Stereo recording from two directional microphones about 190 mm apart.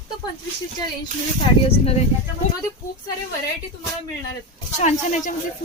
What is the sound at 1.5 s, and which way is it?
Speech, 25° left (ahead or behind).